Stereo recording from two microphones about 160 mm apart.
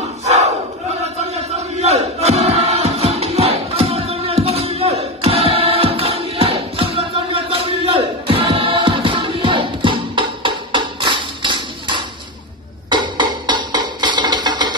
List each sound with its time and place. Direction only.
0.2 s battle cry: 40° right (ahead or behind)
12.9 s music: 25° right (ahead or behind)